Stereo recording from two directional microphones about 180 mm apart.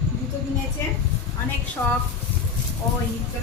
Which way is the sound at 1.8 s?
5° left (ahead or behind).